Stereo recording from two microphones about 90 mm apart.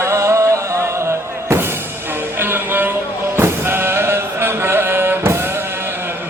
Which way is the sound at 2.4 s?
20° right (ahead or behind).